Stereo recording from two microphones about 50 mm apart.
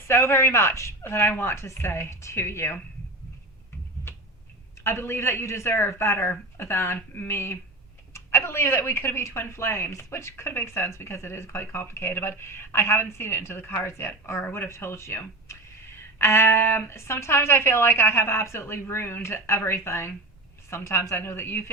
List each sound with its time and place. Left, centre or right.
0.1 s speech: left
1.0 s speech: left
1.6 s speech: left
4.1 s a sound: left
4.8 s speech: left
10.5 s speech: left